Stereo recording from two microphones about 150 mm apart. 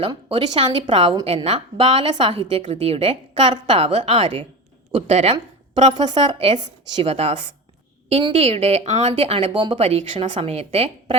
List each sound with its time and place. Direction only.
0.3 s a woman's voice: 30° right (ahead or behind)
5.9 s a woman's voice: 30° right (ahead or behind)
9.5 s a woman's voice: 30° right (ahead or behind)